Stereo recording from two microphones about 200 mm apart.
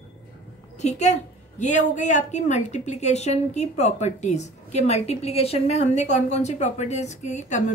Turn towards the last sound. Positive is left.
turn(degrees=35)  # may be behind; listen again after turning